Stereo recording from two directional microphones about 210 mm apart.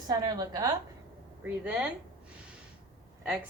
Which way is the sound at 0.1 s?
20° right (ahead or behind).